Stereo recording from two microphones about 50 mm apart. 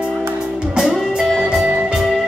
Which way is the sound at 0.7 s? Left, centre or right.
Centre.